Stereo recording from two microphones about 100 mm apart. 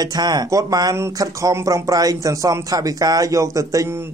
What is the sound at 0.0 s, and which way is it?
Speech, 40° right (ahead or behind).